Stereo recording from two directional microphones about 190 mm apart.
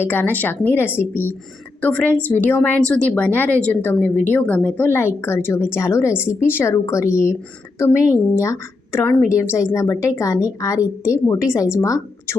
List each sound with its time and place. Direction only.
0.0 s speech: 10° left (ahead or behind)